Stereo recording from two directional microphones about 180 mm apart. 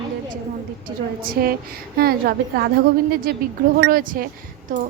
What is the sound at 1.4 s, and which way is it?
A woman's voice, 60° right (ahead or behind).